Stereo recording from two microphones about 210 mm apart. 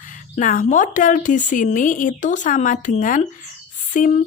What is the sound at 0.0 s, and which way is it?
A woman's voice, 40° left (ahead or behind).